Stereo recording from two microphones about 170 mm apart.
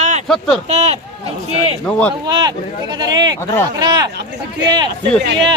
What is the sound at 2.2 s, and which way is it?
Speech, 20° right (ahead or behind).